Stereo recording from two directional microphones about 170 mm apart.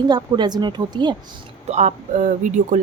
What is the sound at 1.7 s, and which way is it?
Speech, 45° right (ahead or behind).